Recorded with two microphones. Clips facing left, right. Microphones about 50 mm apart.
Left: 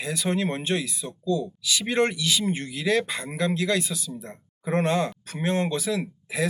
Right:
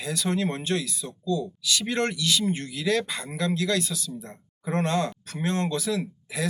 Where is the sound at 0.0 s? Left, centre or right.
Centre.